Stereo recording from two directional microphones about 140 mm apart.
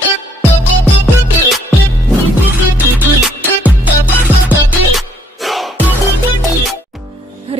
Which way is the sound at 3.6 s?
10° right (ahead or behind).